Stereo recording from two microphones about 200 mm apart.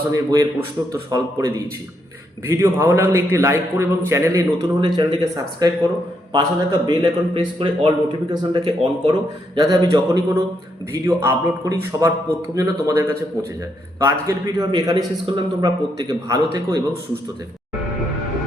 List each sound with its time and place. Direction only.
0.1 s a man's voice: 15° right (ahead or behind)